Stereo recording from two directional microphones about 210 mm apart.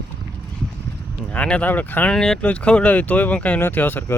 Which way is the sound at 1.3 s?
5° left (ahead or behind).